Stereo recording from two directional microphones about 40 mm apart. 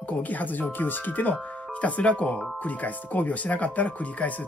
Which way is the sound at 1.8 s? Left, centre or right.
Left.